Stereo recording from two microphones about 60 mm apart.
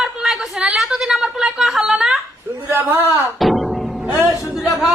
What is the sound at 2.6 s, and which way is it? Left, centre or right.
Speech, right.